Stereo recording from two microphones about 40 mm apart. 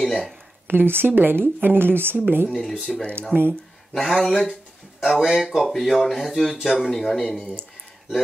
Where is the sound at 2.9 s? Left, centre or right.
Centre.